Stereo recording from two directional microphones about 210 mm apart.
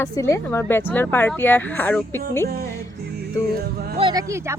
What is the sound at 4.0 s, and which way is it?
Speech, 20° right (ahead or behind).